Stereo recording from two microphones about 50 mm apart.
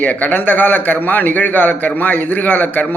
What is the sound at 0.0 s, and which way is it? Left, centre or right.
A man's voice, left.